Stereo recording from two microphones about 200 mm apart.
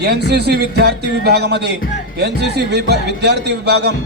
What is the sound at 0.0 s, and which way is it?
A man's voice, 55° right (ahead or behind).